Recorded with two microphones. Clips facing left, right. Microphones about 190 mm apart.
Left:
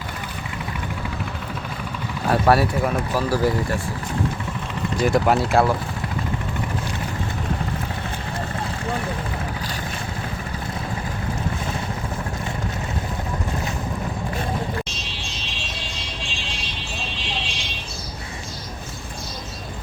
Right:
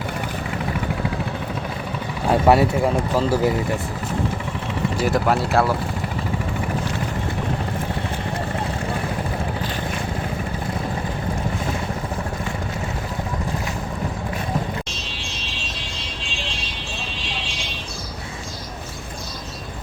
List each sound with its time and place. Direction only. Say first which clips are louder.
2.3 s speech: right 2 dB; 20° right (ahead or behind)
4.9 s speech: left 2 dB; 5° right (ahead or behind)